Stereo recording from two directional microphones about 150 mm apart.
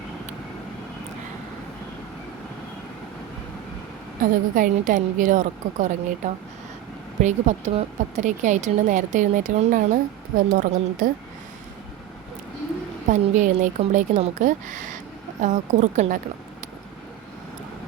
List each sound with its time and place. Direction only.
4.2 s speech: 65° right (ahead or behind)
7.2 s speech: 50° right (ahead or behind)
13.1 s speech: 55° right (ahead or behind)